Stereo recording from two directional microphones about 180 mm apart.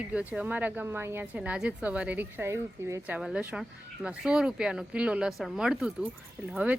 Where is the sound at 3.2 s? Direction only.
5° right (ahead or behind).